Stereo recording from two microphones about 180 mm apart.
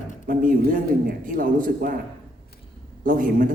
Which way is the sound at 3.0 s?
50° right (ahead or behind).